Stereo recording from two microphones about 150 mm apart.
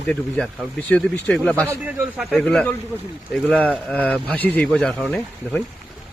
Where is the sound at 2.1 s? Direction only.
5° left (ahead or behind).